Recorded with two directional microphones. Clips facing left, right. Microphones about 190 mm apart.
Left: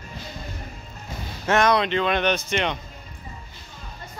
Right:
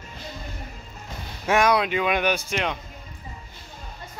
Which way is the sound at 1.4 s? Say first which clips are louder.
Even; 10° right (ahead or behind).